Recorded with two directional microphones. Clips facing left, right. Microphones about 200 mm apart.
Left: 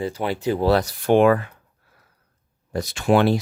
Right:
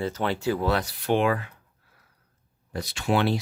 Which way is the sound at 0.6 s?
40° left (ahead or behind).